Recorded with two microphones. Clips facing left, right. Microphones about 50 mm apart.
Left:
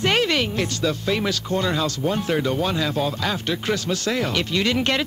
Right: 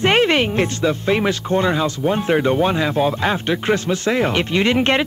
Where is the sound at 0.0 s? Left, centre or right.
Right.